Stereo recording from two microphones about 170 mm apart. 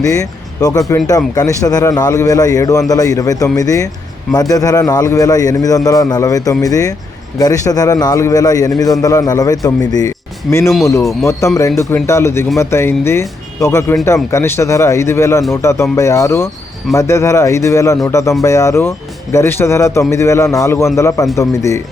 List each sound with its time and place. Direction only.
0.0 s speech: 20° left (ahead or behind)